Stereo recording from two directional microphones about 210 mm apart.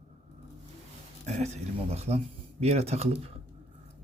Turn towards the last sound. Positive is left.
turn(degrees=-30)  # may be behind; listen again after turning